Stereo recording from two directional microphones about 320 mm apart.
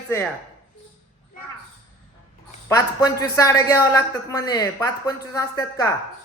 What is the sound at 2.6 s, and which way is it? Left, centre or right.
A woman's voice, centre.